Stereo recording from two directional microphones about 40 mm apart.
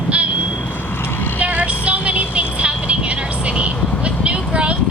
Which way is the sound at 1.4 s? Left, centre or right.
Right.